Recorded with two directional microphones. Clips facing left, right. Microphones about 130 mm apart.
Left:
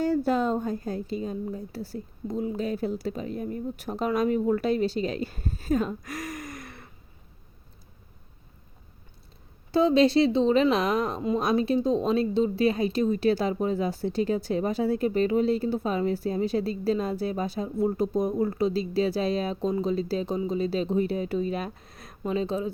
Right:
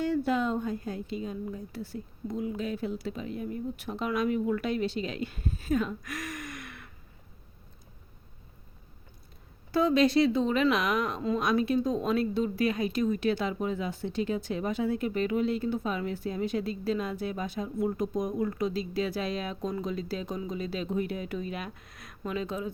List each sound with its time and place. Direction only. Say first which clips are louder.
0.0 s a woman's voice: left 3 dB; 40° left (ahead or behind)
9.7 s a woman's voice: left 3 dB; 25° left (ahead or behind)